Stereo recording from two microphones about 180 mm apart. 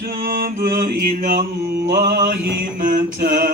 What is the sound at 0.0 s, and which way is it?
Mantra, 55° right (ahead or behind).